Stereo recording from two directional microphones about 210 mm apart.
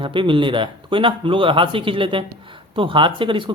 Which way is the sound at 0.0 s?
25° right (ahead or behind).